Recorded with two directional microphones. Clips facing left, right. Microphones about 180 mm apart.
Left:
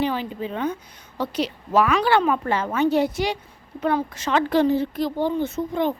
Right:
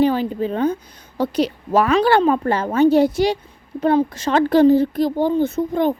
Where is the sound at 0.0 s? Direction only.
40° right (ahead or behind).